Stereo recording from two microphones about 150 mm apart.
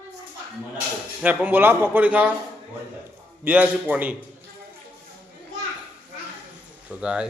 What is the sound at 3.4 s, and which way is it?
Speech, 10° right (ahead or behind).